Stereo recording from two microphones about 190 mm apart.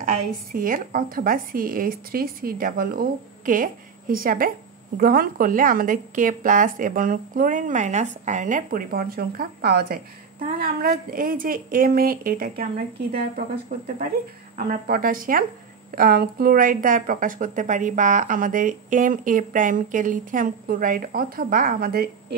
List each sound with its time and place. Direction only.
0.5 s speech: 50° right (ahead or behind)
13.7 s speech: 40° right (ahead or behind)
14.9 s speech: 50° right (ahead or behind)